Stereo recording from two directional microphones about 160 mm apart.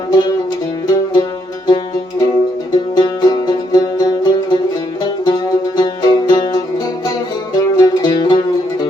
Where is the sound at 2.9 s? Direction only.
25° left (ahead or behind).